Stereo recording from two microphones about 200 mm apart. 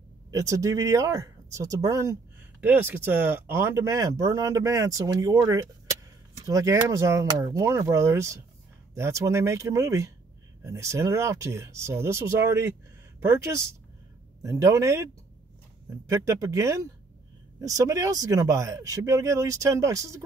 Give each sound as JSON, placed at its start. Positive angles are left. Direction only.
{"t": 0.3, "sound": "speech", "side_deg": -15}
{"t": 16.1, "sound": "speech", "side_deg": -15}